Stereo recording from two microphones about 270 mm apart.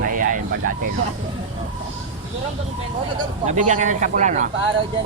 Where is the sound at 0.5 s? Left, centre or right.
Right.